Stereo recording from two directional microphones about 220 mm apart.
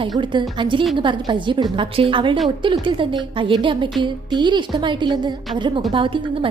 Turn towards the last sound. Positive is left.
turn(degrees=-25)  # may be behind; listen again after turning